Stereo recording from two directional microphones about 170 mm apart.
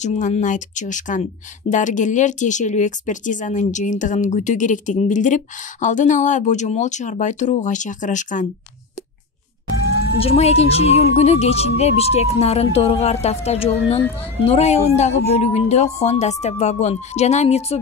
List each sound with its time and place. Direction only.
0.0 s speech: 40° left (ahead or behind)
10.1 s a woman's voice: 35° left (ahead or behind)